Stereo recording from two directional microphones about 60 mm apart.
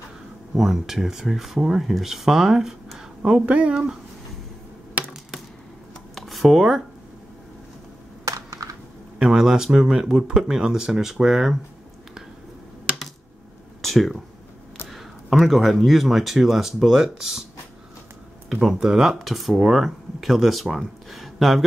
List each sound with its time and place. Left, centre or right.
0.6 s speech: centre
3.2 s speech: centre
6.1 s a sound: centre
8.3 s computer keyboard: right
9.2 s speech: centre
13.7 s a sound: centre
15.4 s speech: centre
18.5 s speech: centre